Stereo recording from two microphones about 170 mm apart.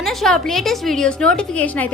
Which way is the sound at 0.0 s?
Centre (ahead or behind).